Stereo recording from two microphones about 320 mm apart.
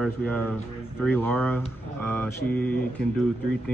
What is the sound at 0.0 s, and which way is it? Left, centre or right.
Speech, centre.